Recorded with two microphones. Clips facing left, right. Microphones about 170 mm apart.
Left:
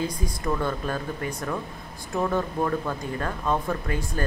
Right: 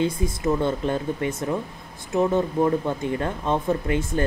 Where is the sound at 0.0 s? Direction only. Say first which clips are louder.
Right 5 dB; 25° right (ahead or behind).